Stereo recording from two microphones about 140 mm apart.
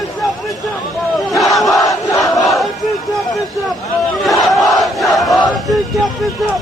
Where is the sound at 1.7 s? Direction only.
25° left (ahead or behind).